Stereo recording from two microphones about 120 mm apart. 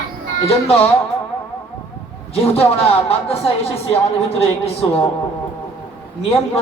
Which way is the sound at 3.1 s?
55° left (ahead or behind).